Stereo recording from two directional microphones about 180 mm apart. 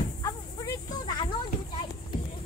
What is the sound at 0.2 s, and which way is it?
Snake, 20° left (ahead or behind).